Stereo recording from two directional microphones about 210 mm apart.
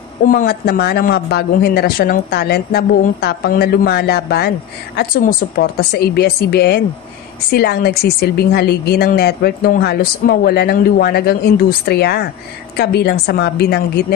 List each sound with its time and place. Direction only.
0.2 s speech: 40° left (ahead or behind)